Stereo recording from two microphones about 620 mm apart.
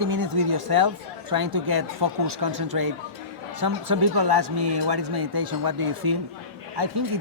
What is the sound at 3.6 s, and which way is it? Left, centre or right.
Speech, right.